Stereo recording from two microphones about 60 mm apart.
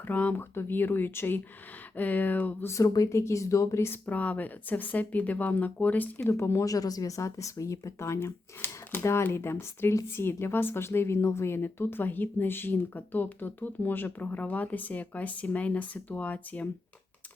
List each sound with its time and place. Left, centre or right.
0.1 s a woman's voice: left
2.0 s speech: left
2.8 s a woman's voice: left
3.1 s speech: left
4.0 s speech: left
6.2 s speech: left
6.7 s a woman's voice: left